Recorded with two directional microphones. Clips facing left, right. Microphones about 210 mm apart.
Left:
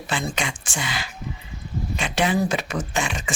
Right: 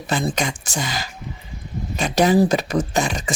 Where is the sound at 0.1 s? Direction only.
40° right (ahead or behind).